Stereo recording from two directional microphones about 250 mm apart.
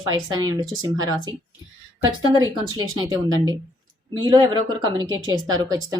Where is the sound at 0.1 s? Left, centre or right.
Centre.